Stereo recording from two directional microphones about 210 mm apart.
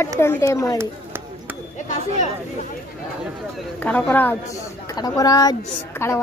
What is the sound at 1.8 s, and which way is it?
Speech, 35° left (ahead or behind).